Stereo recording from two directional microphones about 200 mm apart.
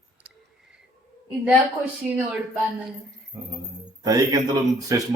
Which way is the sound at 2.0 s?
Centre (ahead or behind).